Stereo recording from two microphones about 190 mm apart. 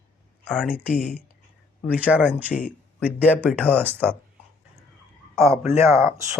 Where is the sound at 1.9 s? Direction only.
5° right (ahead or behind).